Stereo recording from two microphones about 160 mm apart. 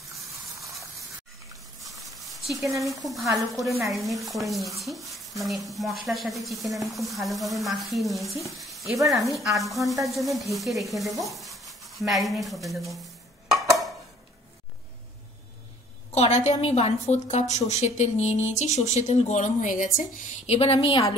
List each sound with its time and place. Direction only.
1.5 s a sound: centre (ahead or behind)
2.6 s speech: 20° right (ahead or behind)
3.1 s speech: centre (ahead or behind)
8.5 s sizzle: centre (ahead or behind)
9.4 s speech: centre (ahead or behind)
16.2 s a woman's voice: 45° left (ahead or behind)
20.4 s a woman's voice: 35° left (ahead or behind)